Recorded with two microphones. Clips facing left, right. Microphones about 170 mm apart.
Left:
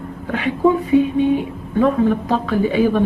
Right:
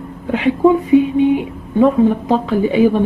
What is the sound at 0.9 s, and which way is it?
A woman's voice, 20° right (ahead or behind).